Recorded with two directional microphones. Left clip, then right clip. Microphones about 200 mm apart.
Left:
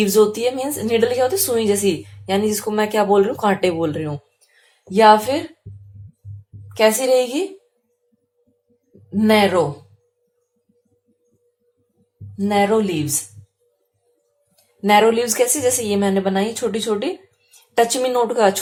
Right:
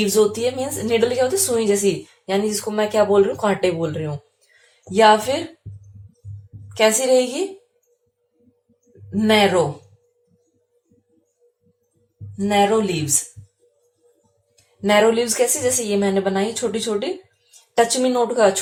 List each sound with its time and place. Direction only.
0.0 s a woman's voice: 30° left (ahead or behind)
6.7 s a woman's voice: 30° left (ahead or behind)
9.0 s a woman's voice: 25° left (ahead or behind)
12.4 s a woman's voice: 25° left (ahead or behind)
14.8 s a woman's voice: 30° left (ahead or behind)